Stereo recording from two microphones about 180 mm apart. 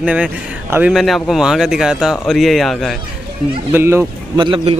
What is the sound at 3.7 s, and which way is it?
Speech, 10° right (ahead or behind).